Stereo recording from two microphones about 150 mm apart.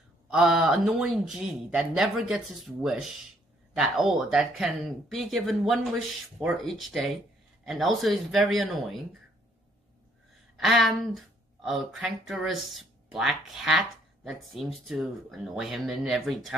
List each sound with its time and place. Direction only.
0.3 s speech: 5° right (ahead or behind)
10.6 s speech: centre (ahead or behind)